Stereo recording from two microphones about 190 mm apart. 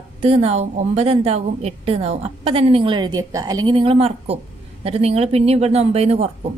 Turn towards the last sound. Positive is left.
turn(degrees=-35)  # may be behind; listen again after turning